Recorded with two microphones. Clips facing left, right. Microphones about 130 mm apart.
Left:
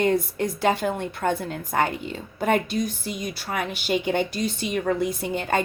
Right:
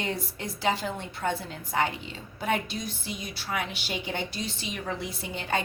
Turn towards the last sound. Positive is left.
turn(degrees=50)  # may be behind; listen again after turning